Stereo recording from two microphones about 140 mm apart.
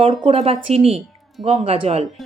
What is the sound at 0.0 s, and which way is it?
Speech, 45° right (ahead or behind).